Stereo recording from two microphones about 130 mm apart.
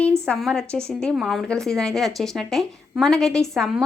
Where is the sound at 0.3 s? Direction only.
5° left (ahead or behind).